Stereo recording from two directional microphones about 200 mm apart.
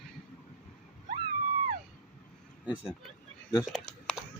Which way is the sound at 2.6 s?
Centre (ahead or behind).